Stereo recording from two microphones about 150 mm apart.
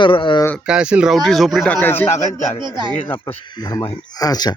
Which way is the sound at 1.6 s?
15° left (ahead or behind).